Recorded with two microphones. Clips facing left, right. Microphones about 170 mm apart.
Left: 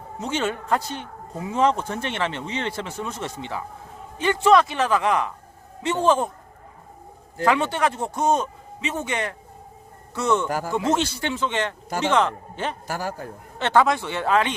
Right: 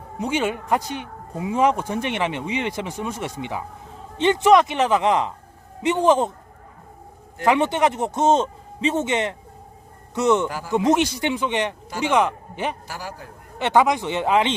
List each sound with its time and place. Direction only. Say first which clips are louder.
0.2 s a man's voice: right 3 dB; 15° right (ahead or behind)
7.4 s a man's voice: right 2 dB; 20° right (ahead or behind)
12.9 s a man's voice: left 5 dB; 50° left (ahead or behind)
13.6 s speech: right 1 dB; 15° right (ahead or behind)